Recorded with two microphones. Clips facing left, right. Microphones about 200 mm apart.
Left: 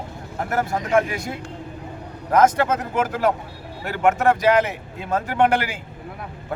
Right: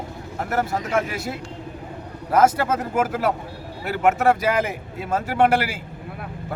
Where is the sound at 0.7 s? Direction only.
Centre (ahead or behind).